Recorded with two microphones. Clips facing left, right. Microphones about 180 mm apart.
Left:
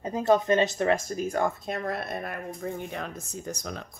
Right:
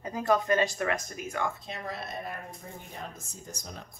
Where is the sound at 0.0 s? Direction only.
25° left (ahead or behind).